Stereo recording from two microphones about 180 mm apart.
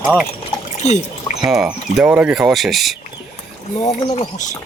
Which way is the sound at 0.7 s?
40° left (ahead or behind).